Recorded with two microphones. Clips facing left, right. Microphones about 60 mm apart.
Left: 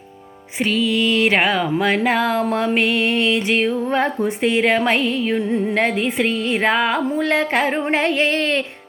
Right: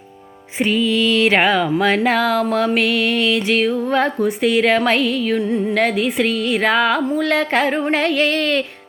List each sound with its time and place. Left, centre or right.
0.6 s music: centre
0.9 s speech: centre
2.2 s music: left
4.4 s speech: left
5.0 s music: left
5.3 s music: centre